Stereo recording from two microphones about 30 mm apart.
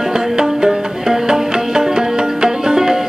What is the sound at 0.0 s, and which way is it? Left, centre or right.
Music, centre.